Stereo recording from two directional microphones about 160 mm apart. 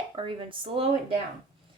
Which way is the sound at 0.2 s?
35° right (ahead or behind).